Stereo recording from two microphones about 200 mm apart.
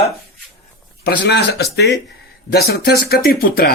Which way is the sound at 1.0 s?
55° left (ahead or behind).